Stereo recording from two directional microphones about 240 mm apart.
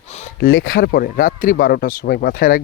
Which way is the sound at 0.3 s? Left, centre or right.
Left.